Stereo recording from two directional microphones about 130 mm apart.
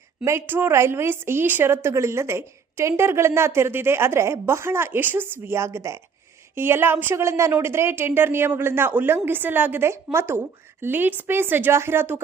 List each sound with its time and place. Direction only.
0.3 s a woman's voice: 15° right (ahead or behind)